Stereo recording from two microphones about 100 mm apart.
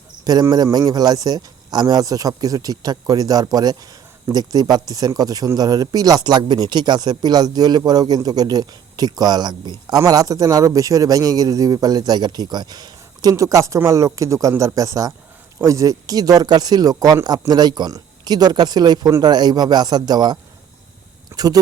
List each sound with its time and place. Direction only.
0.5 s speech: 40° right (ahead or behind)